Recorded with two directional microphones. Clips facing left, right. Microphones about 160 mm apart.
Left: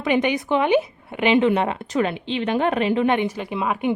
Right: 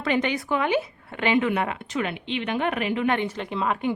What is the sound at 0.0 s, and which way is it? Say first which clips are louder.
A woman's voice: left 4 dB; 15° left (ahead or behind).